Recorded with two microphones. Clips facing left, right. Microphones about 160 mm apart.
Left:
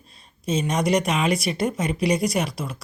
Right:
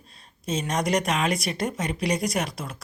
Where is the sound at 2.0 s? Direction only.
40° right (ahead or behind).